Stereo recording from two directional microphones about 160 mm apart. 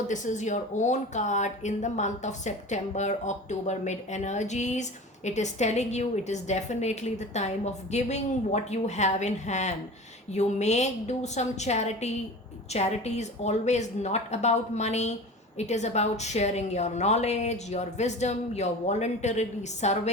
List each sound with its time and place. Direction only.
0.1 s speech: 50° left (ahead or behind)